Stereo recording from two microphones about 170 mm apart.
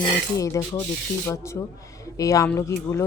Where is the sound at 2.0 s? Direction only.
20° left (ahead or behind).